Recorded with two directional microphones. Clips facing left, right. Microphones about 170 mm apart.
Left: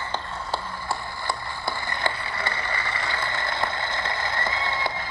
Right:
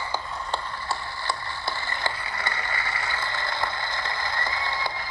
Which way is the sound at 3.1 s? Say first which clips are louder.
Left 2 dB; 25° left (ahead or behind).